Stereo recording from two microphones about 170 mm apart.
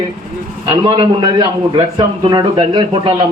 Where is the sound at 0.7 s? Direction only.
30° right (ahead or behind).